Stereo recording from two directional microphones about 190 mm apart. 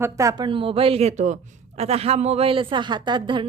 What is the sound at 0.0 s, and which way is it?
A man's voice, 15° right (ahead or behind).